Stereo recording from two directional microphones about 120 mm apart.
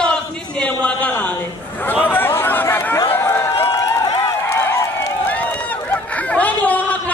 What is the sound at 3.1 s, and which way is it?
Run, 15° left (ahead or behind).